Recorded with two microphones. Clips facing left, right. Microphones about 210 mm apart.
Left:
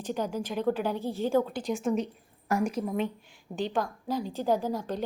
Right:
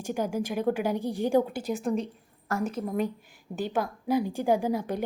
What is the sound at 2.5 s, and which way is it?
Speech, 15° left (ahead or behind).